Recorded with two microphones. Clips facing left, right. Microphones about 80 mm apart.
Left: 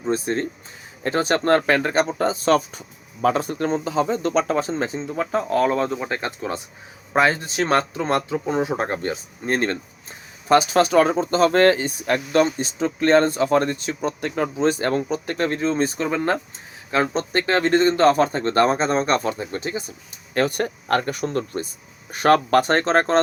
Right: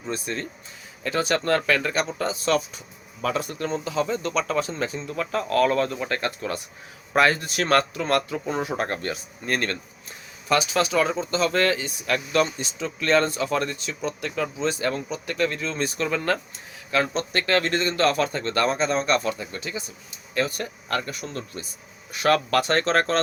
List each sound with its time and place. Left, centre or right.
0.0 s a man's voice: left
20.3 s speech: left